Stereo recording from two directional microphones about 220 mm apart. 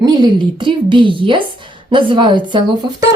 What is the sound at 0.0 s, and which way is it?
A woman's voice, 20° right (ahead or behind).